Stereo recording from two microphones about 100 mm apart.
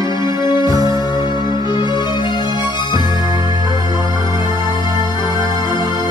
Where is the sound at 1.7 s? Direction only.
50° left (ahead or behind).